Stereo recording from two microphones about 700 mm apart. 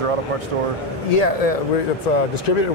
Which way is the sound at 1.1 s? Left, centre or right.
Left.